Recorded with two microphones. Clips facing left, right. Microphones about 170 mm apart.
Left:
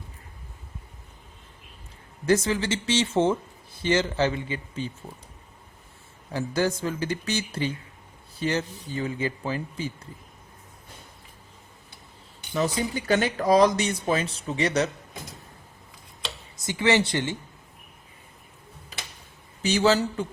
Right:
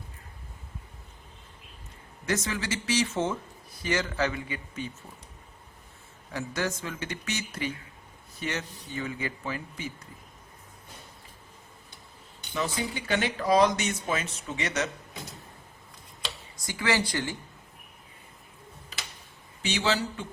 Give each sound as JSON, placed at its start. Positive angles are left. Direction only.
{"t": 2.2, "sound": "a man's voice", "side_deg": 30}
{"t": 6.3, "sound": "speech", "side_deg": 30}
{"t": 12.5, "sound": "speech", "side_deg": 40}
{"t": 16.6, "sound": "a man's voice", "side_deg": 25}
{"t": 19.6, "sound": "speech", "side_deg": 40}